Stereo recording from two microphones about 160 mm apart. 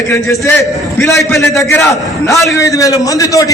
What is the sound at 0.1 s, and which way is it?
Speech, 15° left (ahead or behind).